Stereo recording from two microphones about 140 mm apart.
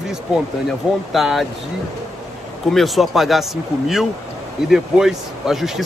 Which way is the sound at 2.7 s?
Centre (ahead or behind).